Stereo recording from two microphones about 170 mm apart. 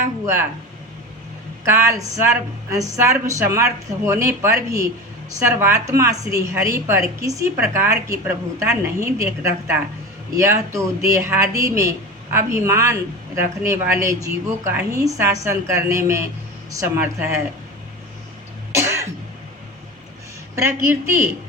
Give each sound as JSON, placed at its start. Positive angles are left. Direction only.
{"t": 1.6, "sound": "speech", "side_deg": -15}
{"t": 18.7, "sound": "music", "side_deg": -15}
{"t": 20.8, "sound": "speech", "side_deg": -15}